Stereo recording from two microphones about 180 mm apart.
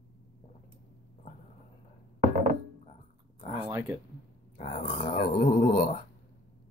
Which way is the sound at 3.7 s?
15° right (ahead or behind).